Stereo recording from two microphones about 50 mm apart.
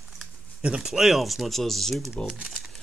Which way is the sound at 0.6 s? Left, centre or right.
Right.